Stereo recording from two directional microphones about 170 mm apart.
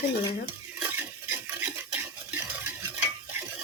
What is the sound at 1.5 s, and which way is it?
Stir, 15° right (ahead or behind).